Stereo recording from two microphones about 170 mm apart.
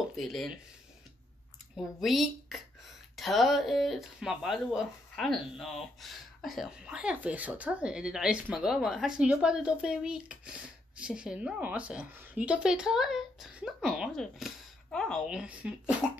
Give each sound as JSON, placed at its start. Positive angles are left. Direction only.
{"t": 0.1, "sound": "speech", "side_deg": 0}
{"t": 1.8, "sound": "speech", "side_deg": 0}